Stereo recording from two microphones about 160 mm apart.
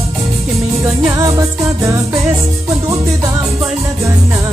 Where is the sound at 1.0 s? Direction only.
20° right (ahead or behind).